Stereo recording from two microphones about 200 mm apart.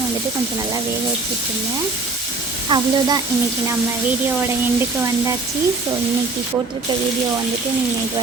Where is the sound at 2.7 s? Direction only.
25° right (ahead or behind).